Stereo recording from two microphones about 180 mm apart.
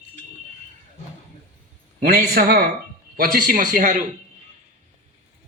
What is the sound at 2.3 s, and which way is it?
A man's voice, 55° right (ahead or behind).